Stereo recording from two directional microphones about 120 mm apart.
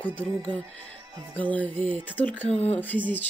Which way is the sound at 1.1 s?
30° right (ahead or behind).